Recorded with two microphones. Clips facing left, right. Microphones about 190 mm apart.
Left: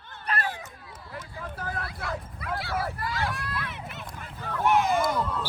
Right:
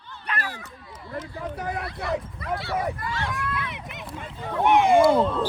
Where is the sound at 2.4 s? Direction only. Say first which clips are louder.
Right 3 dB; centre (ahead or behind).